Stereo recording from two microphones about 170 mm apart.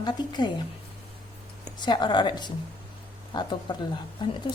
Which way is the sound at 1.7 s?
25° left (ahead or behind).